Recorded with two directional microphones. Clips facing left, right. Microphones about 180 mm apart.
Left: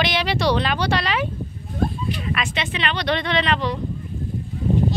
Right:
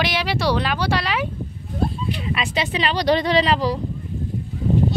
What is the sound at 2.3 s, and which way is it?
Speech, 35° right (ahead or behind).